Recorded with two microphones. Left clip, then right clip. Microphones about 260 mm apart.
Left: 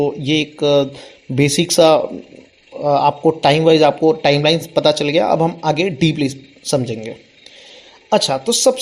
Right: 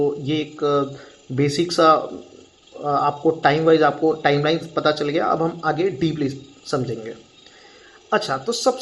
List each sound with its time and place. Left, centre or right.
0.0 s speech: left
8.1 s speech: left